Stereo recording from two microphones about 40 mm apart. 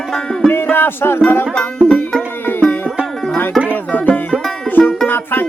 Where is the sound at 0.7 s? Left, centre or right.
Left.